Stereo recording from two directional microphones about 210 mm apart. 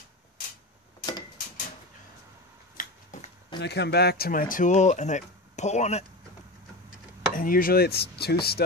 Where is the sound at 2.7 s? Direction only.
35° left (ahead or behind).